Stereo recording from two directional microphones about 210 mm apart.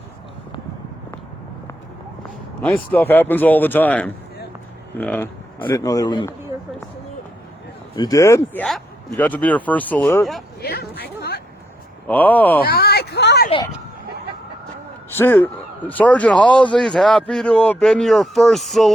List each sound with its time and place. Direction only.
2.6 s speech: 5° left (ahead or behind)
7.9 s speech: 15° left (ahead or behind)
10.6 s a sound: 50° left (ahead or behind)
12.0 s speech: 10° left (ahead or behind)
12.6 s a sound: 50° left (ahead or behind)
15.1 s speech: 10° left (ahead or behind)